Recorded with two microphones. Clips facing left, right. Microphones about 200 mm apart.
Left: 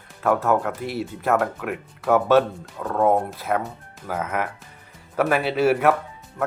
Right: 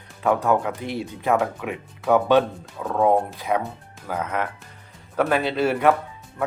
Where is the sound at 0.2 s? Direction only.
Centre (ahead or behind).